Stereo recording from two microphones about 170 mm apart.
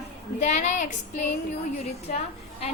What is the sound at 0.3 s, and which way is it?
A woman's voice, 45° left (ahead or behind).